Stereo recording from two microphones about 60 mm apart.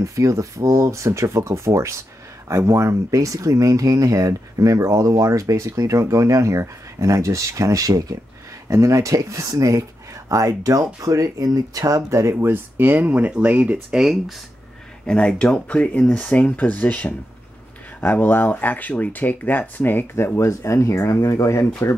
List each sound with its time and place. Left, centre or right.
0.0 s speech: right
11.0 s speech: right
12.2 s speech: right
12.5 s speech: right
13.9 s speech: centre
15.0 s speech: centre; by 20.3 s left
20.3 s speech: left